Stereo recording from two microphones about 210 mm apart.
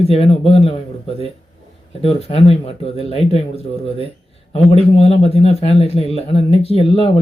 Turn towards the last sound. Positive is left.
turn(degrees=25)  # may be behind; listen again after turning